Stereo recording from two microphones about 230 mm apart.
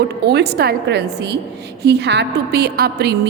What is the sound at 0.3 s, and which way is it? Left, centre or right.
A woman's voice, right.